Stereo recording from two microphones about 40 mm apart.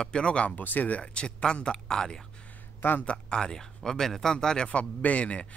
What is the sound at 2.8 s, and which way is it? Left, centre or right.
Speech, left.